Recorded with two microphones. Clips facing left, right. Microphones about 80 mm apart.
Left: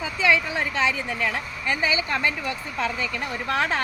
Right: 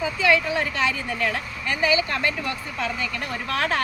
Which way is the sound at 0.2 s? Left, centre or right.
Left.